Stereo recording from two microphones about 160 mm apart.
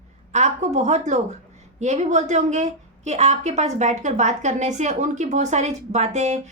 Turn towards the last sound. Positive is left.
turn(degrees=-45)  # may be behind; listen again after turning